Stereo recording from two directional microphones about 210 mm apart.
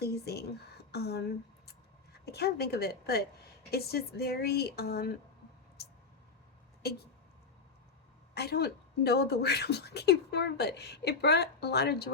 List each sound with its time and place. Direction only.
0.0 s a sound: 50° left (ahead or behind)
2.2 s speech: 50° left (ahead or behind)
8.4 s speech: 50° left (ahead or behind)